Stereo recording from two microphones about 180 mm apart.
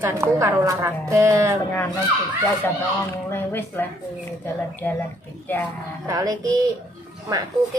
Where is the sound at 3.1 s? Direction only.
10° left (ahead or behind).